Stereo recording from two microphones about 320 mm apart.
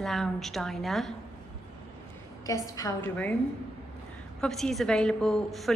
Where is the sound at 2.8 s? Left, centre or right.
Centre.